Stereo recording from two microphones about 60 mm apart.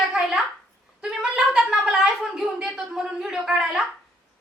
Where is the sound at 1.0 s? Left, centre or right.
Centre.